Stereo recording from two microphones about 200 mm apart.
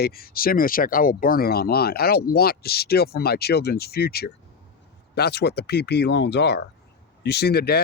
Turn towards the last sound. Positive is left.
turn(degrees=55)  # may be behind; listen again after turning